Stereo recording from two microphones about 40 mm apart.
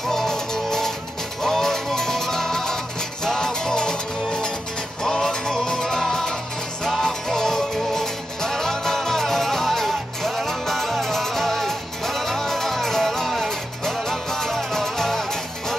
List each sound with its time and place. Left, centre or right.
0.1 s music: centre